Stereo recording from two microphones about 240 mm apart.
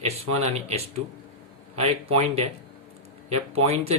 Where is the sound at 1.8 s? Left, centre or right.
Right.